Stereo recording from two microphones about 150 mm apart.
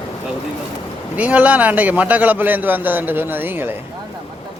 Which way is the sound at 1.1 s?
10° right (ahead or behind).